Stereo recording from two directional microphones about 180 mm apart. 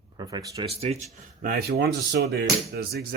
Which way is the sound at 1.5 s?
60° right (ahead or behind).